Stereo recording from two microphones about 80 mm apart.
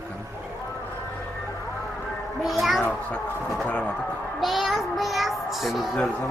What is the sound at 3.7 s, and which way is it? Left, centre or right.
Speech, centre.